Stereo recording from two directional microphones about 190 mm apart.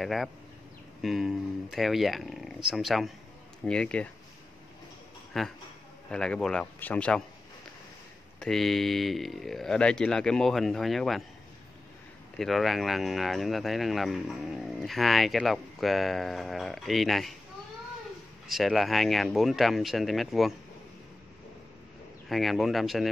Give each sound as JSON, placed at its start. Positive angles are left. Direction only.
{"t": 0.0, "sound": "speech", "side_deg": 0}
{"t": 5.3, "sound": "speech", "side_deg": 0}
{"t": 8.4, "sound": "speech", "side_deg": 0}
{"t": 12.4, "sound": "speech", "side_deg": 0}
{"t": 18.5, "sound": "speech", "side_deg": 0}
{"t": 22.3, "sound": "speech", "side_deg": 0}